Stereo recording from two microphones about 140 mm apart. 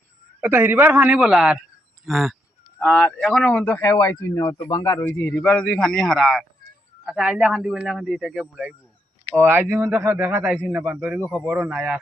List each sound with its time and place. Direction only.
0.4 s a man's voice: 15° right (ahead or behind)
9.4 s a man's voice: 15° right (ahead or behind)